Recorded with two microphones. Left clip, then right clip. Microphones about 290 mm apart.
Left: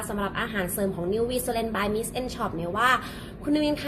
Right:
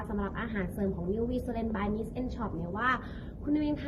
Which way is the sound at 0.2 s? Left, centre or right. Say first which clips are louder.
Left 9 dB; centre.